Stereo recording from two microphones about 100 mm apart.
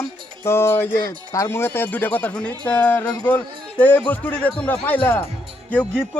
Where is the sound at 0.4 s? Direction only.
25° left (ahead or behind).